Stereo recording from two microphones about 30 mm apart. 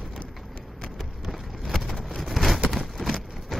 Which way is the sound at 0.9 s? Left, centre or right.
Centre.